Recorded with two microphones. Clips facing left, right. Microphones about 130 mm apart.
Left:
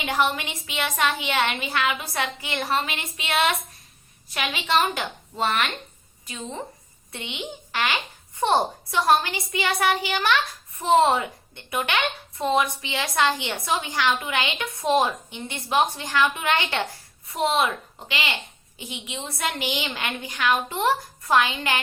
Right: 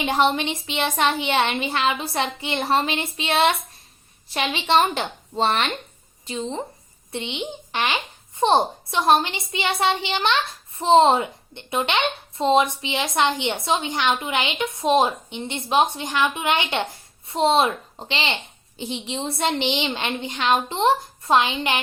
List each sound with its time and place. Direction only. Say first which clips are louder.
0.0 s a woman's voice: right 4 dB; 25° right (ahead or behind)